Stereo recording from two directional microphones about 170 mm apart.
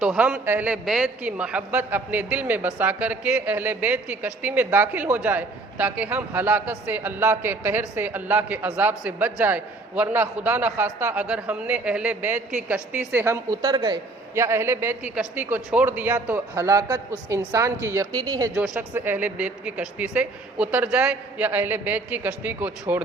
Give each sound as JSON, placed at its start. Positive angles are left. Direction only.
{"t": 0.0, "sound": "a man's voice", "side_deg": -5}
{"t": 18.5, "sound": "a man's voice", "side_deg": -5}